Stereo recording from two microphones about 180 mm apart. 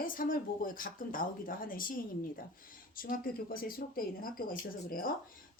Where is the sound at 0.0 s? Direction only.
50° left (ahead or behind).